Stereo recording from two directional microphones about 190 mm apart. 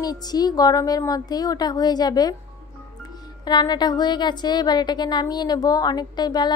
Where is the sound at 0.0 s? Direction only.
20° left (ahead or behind).